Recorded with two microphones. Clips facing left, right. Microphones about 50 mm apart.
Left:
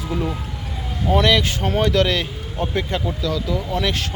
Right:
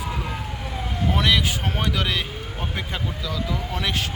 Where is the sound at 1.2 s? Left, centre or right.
Centre.